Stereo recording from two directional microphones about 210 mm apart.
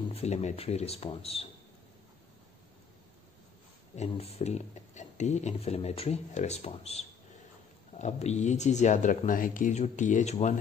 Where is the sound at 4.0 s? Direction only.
30° left (ahead or behind).